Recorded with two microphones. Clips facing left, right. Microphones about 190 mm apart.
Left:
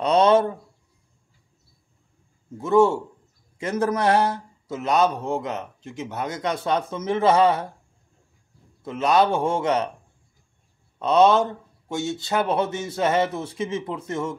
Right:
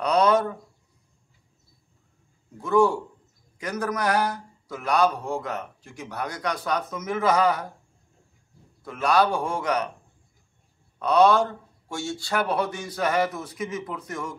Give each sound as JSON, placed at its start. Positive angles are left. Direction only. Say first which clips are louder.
{"t": 0.0, "sound": "a sound", "louder": "left 3 dB", "side_deg": 25}
{"t": 2.5, "sound": "a man's voice", "louder": "left 3 dB", "side_deg": 25}
{"t": 8.8, "sound": "a man's voice", "louder": "left 2 dB", "side_deg": 20}
{"t": 11.0, "sound": "a man's voice", "louder": "left 2 dB", "side_deg": 20}